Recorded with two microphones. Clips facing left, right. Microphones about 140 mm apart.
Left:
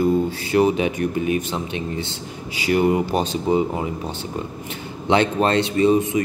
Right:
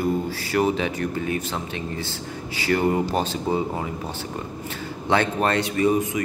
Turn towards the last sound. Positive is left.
turn(degrees=25)  # may be behind; listen again after turning